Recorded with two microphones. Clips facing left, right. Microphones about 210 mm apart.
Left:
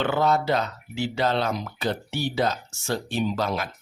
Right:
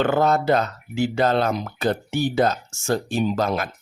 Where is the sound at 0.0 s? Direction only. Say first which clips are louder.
Right 3 dB; 45° right (ahead or behind).